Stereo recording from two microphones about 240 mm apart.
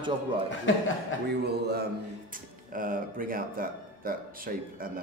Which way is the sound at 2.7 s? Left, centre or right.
Right.